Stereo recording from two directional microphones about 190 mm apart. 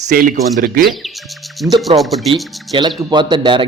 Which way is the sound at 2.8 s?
25° right (ahead or behind).